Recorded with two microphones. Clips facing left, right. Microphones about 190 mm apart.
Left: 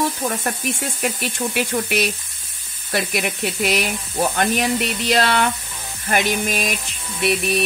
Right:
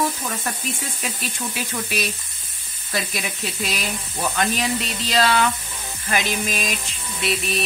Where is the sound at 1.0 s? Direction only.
60° left (ahead or behind).